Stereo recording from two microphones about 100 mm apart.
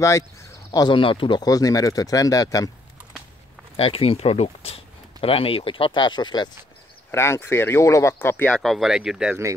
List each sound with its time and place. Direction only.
0.7 s speech: 50° left (ahead or behind)
1.4 s speech: 35° left (ahead or behind)
3.7 s speech: 75° left (ahead or behind); by 6.5 s 45° left (ahead or behind)
7.1 s speech: 25° left (ahead or behind)
8.5 s speech: centre (ahead or behind)